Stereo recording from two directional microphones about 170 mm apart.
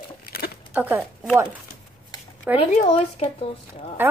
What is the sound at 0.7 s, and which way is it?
Speech, 10° right (ahead or behind).